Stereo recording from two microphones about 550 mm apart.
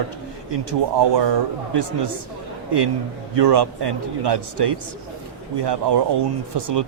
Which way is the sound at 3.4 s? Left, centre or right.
Right.